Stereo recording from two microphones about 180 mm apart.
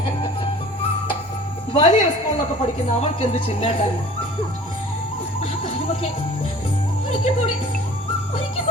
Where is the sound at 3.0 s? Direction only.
35° left (ahead or behind).